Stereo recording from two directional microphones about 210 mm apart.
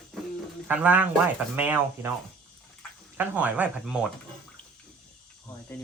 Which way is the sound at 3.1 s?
10° right (ahead or behind).